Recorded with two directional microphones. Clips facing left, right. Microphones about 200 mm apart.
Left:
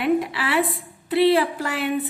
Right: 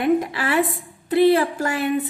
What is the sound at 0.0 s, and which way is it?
A woman's voice, 45° right (ahead or behind).